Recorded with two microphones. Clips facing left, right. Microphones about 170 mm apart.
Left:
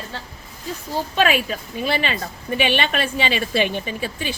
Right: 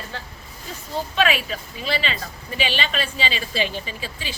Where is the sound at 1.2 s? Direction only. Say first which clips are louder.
Left 3 dB; 45° left (ahead or behind).